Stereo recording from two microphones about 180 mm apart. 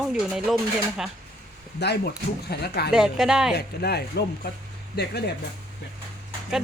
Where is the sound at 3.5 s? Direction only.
65° left (ahead or behind).